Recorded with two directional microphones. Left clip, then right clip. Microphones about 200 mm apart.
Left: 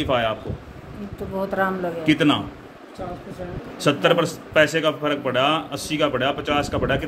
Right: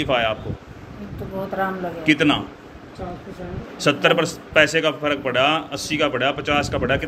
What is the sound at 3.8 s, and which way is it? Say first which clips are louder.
A man's voice: right 1 dB; 15° left (ahead or behind).